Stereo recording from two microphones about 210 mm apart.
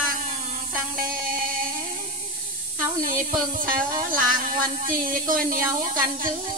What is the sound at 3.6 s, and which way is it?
Speech, 40° right (ahead or behind).